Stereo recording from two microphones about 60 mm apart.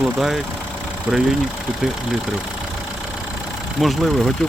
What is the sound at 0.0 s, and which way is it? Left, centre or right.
Speech, centre.